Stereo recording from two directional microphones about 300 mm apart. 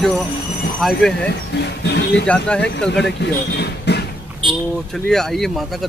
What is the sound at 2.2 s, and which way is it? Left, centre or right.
Speech, centre.